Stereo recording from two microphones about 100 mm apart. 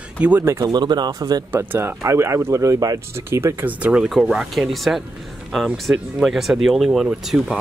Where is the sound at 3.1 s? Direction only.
25° right (ahead or behind).